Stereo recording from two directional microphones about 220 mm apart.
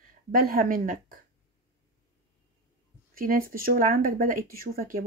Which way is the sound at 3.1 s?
40° right (ahead or behind).